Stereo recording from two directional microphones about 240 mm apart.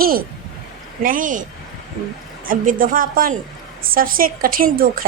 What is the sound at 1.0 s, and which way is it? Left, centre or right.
Speech, right.